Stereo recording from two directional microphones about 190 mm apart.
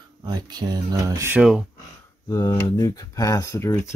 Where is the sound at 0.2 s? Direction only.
20° right (ahead or behind); by 1.7 s 5° right (ahead or behind).